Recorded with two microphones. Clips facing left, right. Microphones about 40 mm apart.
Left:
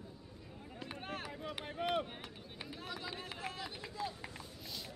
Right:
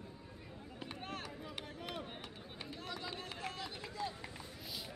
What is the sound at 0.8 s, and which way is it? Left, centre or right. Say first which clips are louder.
Vehicle: left 2 dB; centre.